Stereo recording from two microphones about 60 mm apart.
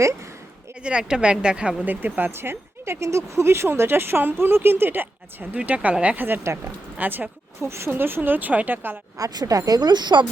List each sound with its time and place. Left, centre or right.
0.8 s a woman's voice: centre
1.8 s speech: right
2.3 s speech: right
5.5 s speech: right
6.5 s speech: right
7.0 s speech: right
7.6 s speech: right
9.1 s speech: right
10.1 s speech: right